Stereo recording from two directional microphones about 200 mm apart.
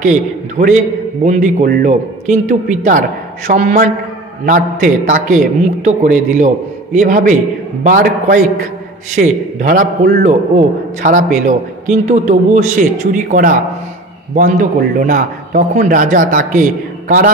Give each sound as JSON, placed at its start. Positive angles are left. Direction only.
{"t": 0.0, "sound": "a man's voice", "side_deg": -40}